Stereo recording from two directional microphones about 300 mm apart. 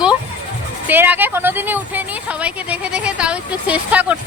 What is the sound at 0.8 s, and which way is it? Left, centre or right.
A woman's voice, centre.